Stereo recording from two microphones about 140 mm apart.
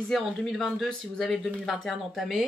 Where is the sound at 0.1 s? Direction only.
Centre (ahead or behind).